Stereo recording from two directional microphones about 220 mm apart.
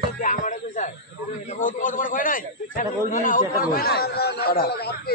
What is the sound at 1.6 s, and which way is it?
A man's voice, 35° left (ahead or behind).